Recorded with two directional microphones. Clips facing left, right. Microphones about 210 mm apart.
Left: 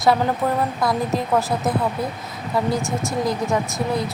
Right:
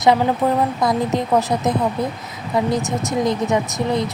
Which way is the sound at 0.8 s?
20° right (ahead or behind).